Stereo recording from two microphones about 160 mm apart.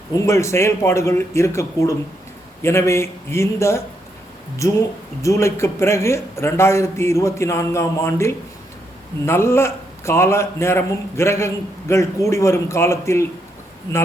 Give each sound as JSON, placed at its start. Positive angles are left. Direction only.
{"t": 0.3, "sound": "a man's voice", "side_deg": 15}
{"t": 5.2, "sound": "a man's voice", "side_deg": 20}